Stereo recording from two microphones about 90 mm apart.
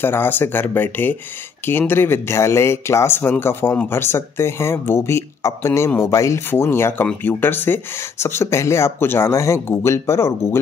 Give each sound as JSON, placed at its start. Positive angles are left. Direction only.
{"t": 0.0, "sound": "speech", "side_deg": 25}